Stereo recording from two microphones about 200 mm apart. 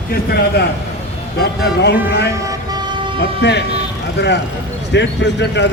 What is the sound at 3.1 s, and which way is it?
A man's voice, 60° left (ahead or behind).